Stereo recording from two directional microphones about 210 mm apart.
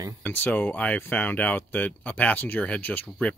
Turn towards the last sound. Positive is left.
turn(degrees=5)  # may be behind; listen again after turning